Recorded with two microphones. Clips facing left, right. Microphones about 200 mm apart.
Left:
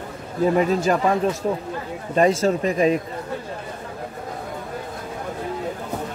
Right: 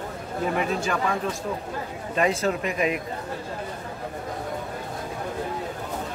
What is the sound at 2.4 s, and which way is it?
Speech, 35° left (ahead or behind).